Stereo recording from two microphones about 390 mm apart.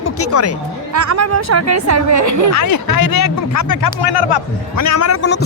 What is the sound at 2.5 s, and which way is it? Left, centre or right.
A man's voice, left.